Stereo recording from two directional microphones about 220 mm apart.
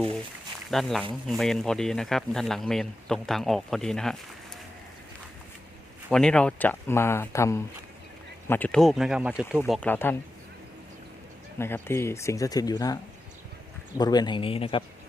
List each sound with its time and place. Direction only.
0.7 s speech: centre (ahead or behind)
6.1 s speech: 5° left (ahead or behind)
11.5 s speech: 10° left (ahead or behind)
14.0 s speech: 20° left (ahead or behind)